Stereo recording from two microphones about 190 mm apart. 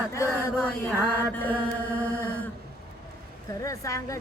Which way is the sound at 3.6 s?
15° left (ahead or behind).